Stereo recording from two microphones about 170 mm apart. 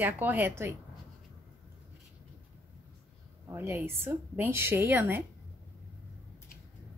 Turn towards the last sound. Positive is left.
turn(degrees=-10)  # may be behind; listen again after turning